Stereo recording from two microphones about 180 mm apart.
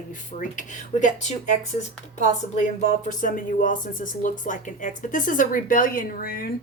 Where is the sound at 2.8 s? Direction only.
45° left (ahead or behind).